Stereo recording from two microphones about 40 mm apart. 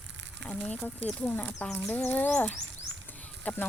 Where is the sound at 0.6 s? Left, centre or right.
Left.